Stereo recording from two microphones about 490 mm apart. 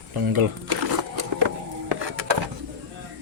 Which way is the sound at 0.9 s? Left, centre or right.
Right.